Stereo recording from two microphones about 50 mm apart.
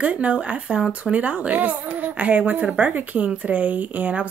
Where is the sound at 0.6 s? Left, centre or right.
Centre.